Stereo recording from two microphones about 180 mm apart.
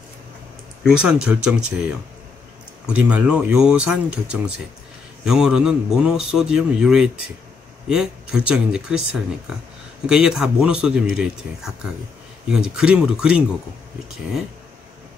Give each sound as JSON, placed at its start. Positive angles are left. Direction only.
{"t": 0.8, "sound": "a man's voice", "side_deg": -5}